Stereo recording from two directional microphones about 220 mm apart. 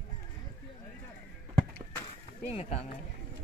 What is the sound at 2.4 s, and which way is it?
Speech, 30° left (ahead or behind).